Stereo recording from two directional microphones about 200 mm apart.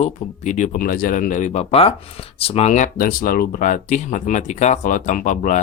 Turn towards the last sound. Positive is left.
turn(degrees=40)  # may be behind; listen again after turning